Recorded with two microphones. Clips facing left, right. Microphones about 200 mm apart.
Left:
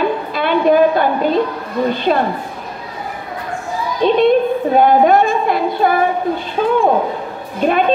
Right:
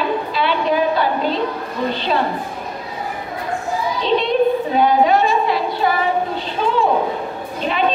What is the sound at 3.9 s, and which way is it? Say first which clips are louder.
A woman's voice: left 6 dB; 50° left (ahead or behind).